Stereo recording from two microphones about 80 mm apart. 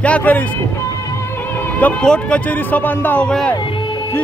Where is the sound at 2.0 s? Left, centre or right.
Centre.